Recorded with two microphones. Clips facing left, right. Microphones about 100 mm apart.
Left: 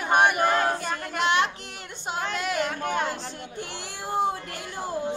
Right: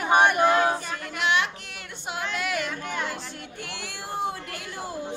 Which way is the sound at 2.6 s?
45° left (ahead or behind).